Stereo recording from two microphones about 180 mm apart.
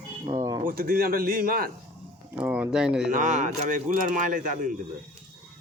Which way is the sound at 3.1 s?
45° right (ahead or behind).